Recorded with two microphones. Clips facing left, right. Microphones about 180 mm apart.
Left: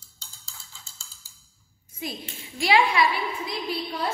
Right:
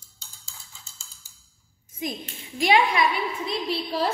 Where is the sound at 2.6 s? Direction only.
20° right (ahead or behind).